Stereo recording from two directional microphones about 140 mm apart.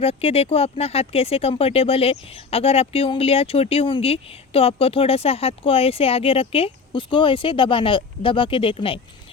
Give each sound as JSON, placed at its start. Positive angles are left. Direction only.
{"t": 0.0, "sound": "speech", "side_deg": 45}